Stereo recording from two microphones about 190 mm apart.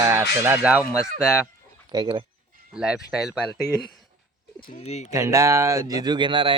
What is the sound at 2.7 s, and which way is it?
Speech, 5° right (ahead or behind).